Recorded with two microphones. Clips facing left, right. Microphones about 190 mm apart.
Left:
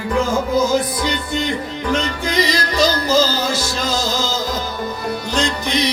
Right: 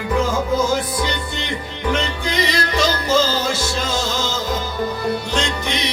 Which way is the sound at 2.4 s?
35° left (ahead or behind).